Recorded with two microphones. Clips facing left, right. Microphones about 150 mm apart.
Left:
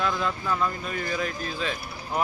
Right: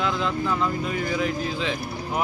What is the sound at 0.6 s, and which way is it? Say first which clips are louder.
Speech: right 3 dB; 15° right (ahead or behind).